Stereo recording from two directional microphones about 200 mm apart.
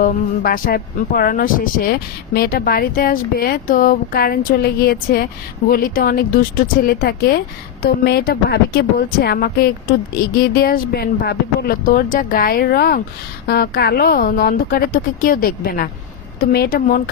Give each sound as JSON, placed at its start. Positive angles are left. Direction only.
{"t": 0.0, "sound": "speech", "side_deg": 45}